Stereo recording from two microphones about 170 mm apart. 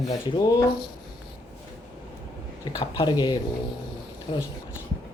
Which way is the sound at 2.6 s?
25° left (ahead or behind).